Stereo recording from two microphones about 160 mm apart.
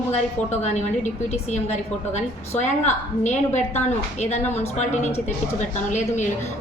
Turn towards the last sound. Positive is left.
turn(degrees=50)  # may be behind; listen again after turning